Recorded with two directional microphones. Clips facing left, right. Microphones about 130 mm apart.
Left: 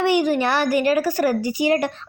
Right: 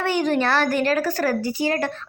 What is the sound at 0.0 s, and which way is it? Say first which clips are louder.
A woman's voice: left 3 dB; 15° left (ahead or behind).